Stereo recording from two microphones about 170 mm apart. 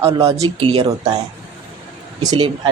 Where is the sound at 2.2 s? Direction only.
25° right (ahead or behind).